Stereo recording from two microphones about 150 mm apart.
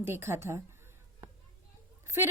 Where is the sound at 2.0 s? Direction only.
15° right (ahead or behind).